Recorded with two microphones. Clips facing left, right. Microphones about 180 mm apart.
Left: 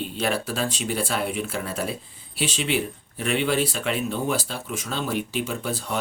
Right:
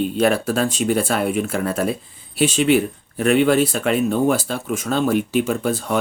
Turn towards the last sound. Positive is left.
turn(degrees=-50)  # may be behind; listen again after turning